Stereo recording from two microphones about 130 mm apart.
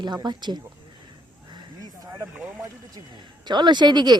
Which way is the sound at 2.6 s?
30° right (ahead or behind).